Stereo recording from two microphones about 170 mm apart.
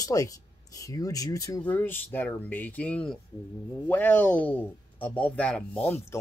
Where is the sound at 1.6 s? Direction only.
10° left (ahead or behind).